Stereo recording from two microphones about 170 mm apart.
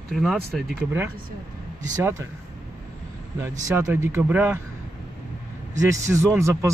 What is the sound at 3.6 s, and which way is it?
Speech, 15° right (ahead or behind).